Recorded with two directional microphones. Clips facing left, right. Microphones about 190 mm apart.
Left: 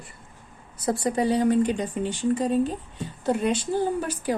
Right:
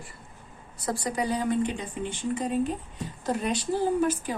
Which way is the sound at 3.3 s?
20° left (ahead or behind).